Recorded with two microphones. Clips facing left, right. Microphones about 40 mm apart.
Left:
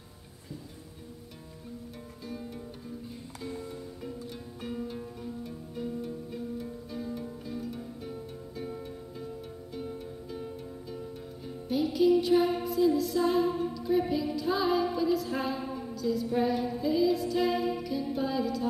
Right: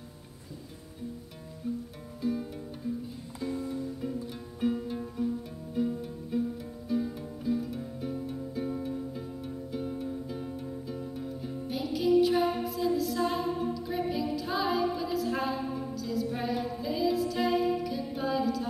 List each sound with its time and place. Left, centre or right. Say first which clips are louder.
2.2 s music: right 8 dB; centre